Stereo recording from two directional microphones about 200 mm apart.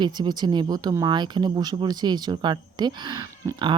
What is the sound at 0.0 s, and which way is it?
Speech, 20° right (ahead or behind).